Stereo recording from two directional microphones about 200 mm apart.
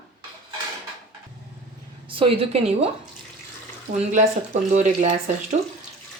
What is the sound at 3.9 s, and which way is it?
Speech, 35° right (ahead or behind).